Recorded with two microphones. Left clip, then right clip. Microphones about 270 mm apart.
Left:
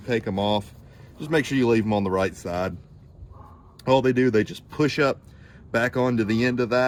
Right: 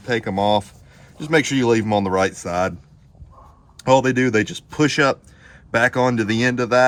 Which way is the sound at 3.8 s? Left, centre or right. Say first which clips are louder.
Right 4 dB; right.